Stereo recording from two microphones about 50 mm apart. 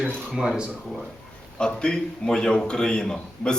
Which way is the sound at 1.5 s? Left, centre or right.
Centre.